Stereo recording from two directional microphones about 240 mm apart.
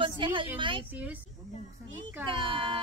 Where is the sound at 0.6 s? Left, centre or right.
Right.